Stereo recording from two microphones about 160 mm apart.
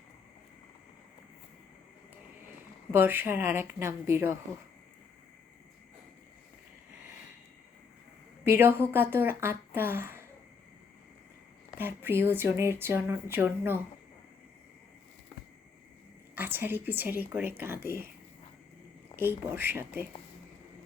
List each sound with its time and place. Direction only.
2.9 s speech: 15° right (ahead or behind)
8.4 s speech: 15° right (ahead or behind)
11.8 s speech: 15° right (ahead or behind)
16.3 s speech: 10° right (ahead or behind)
19.1 s speech: 15° right (ahead or behind)